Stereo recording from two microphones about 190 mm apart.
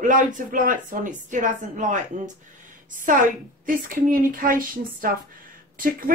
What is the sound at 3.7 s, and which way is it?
Speech, 45° right (ahead or behind).